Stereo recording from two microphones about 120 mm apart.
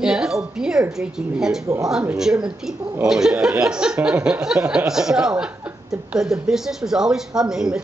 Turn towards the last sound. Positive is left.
turn(degrees=-5)  # may be behind; listen again after turning